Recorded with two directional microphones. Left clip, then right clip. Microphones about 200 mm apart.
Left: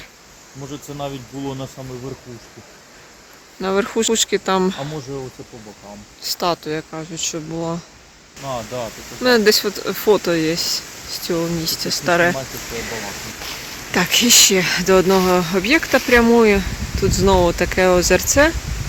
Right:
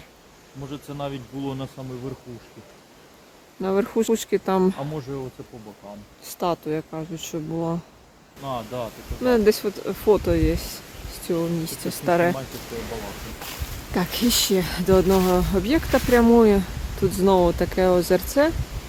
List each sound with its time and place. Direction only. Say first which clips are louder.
0.7 s speech: left 3 dB; 45° left (ahead or behind)
3.6 s speech: left 4 dB; 10° right (ahead or behind)
5.1 s speech: left 3 dB; 20° left (ahead or behind)
6.2 s speech: left 5 dB; 5° right (ahead or behind)
8.4 s speech: left 4 dB; 35° left (ahead or behind)
9.2 s speech: left 5 dB; centre (ahead or behind)
13.9 s speech: left 9 dB; 5° right (ahead or behind)
15.0 s speech: left 4 dB; 5° left (ahead or behind)